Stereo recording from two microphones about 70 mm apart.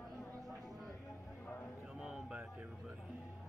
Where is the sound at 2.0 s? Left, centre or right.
Centre.